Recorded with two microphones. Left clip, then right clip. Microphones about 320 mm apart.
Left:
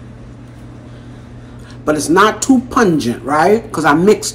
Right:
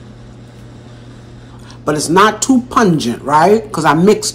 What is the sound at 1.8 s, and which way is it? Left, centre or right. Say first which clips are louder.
Speech: right 1 dB; centre.